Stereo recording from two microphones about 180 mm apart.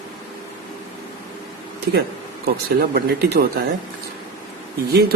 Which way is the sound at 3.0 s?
65° right (ahead or behind).